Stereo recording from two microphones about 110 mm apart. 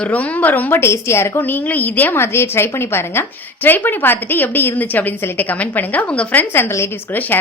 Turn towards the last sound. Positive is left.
turn(degrees=20)  # may be behind; listen again after turning